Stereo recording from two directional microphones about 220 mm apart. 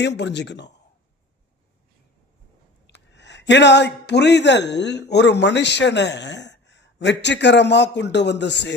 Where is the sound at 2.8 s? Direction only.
50° left (ahead or behind).